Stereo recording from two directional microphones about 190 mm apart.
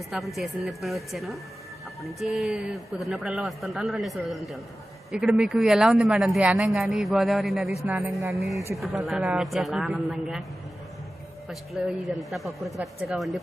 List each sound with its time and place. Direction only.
0.1 s speech: centre (ahead or behind)
11.4 s speech: centre (ahead or behind)